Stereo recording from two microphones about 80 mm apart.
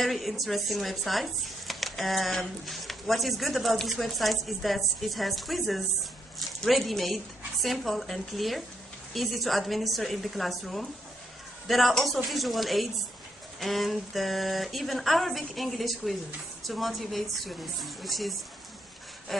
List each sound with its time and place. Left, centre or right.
0.0 s speech: centre